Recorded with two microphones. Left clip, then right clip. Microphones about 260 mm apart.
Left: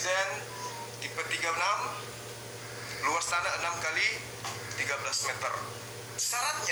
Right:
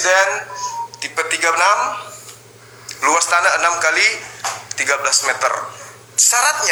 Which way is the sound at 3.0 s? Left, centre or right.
Right.